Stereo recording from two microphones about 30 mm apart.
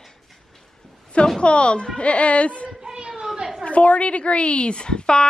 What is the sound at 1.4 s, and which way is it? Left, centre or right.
A woman's voice, left.